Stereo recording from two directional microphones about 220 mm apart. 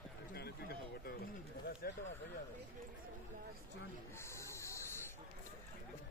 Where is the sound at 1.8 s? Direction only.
45° left (ahead or behind).